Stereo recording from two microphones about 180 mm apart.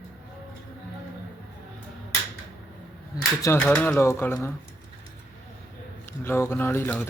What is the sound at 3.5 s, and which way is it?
Speech, 5° left (ahead or behind).